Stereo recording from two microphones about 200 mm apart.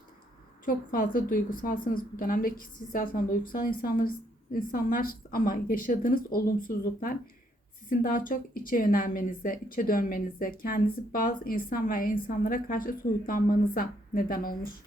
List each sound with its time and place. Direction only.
0.6 s a woman's voice: 45° left (ahead or behind)